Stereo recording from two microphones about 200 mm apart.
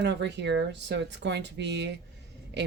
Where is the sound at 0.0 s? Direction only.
60° right (ahead or behind).